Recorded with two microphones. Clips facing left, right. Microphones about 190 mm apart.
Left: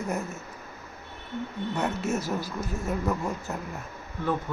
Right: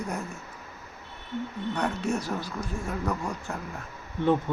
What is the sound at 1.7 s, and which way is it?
Speech, 5° left (ahead or behind).